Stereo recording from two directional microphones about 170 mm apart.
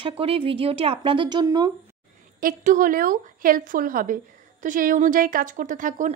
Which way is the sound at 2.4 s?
50° right (ahead or behind).